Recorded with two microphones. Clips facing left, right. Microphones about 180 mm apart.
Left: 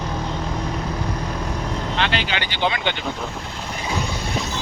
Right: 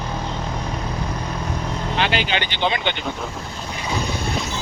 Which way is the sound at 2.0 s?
15° right (ahead or behind).